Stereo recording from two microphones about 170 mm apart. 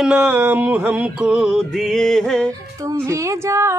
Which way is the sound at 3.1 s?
20° right (ahead or behind).